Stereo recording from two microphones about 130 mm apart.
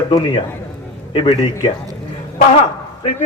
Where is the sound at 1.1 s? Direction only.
45° left (ahead or behind).